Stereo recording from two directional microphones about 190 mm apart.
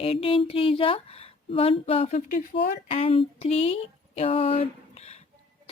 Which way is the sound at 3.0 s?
30° left (ahead or behind).